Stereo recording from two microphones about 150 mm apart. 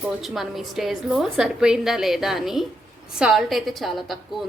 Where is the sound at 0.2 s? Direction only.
Centre (ahead or behind).